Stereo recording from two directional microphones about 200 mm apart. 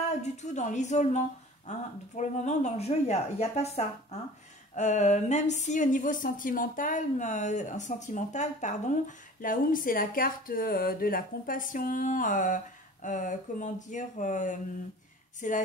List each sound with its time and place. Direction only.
0.2 s speech: 35° left (ahead or behind)